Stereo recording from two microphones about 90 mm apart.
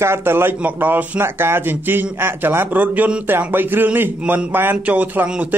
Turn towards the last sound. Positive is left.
turn(degrees=-20)  # may be behind; listen again after turning